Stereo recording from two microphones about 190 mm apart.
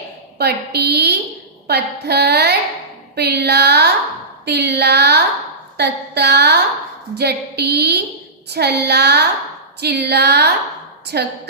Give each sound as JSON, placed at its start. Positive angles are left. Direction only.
{"t": 0.3, "sound": "a woman's voice", "side_deg": -60}